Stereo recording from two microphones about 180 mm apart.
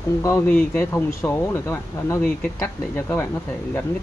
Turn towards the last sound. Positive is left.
turn(degrees=10)  # may be behind; listen again after turning